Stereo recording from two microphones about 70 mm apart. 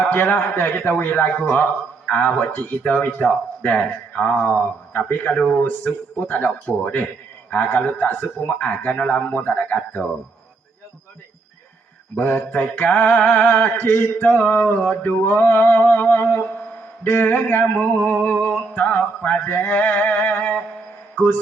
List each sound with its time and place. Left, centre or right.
0.1 s humming: left
5.3 s speech: centre
5.8 s humming: left
12.2 s humming: left